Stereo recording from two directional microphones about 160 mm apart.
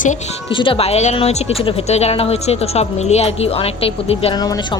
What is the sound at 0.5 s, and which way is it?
Speech, 35° left (ahead or behind).